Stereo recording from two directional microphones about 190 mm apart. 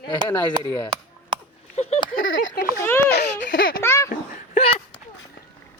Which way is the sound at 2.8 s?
15° left (ahead or behind).